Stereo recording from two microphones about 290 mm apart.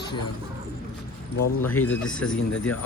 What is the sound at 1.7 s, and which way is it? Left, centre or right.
Speech, centre.